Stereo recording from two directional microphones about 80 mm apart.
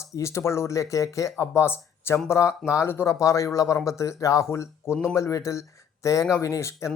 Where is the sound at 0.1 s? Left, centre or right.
Left.